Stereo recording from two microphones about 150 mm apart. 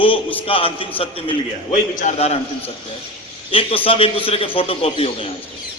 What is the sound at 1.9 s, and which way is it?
Speech, 55° left (ahead or behind).